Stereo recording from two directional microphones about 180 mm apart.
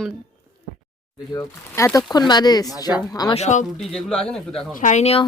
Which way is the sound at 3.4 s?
40° left (ahead or behind).